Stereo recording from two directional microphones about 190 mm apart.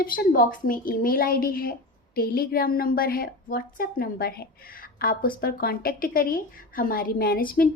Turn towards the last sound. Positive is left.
turn(degrees=50)  # may be behind; listen again after turning